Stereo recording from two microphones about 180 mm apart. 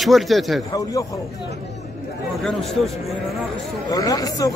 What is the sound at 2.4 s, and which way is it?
Speech, centre (ahead or behind).